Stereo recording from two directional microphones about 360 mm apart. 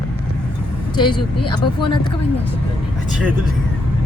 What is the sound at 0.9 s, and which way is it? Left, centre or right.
Speech, centre.